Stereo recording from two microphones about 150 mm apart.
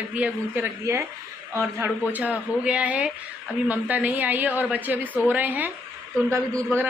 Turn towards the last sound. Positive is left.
turn(degrees=-20)  # may be behind; listen again after turning